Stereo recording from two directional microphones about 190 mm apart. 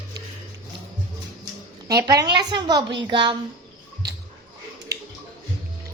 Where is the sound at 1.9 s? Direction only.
20° right (ahead or behind).